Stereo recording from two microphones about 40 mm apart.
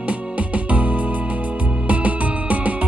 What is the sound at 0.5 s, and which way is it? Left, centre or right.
Music, right.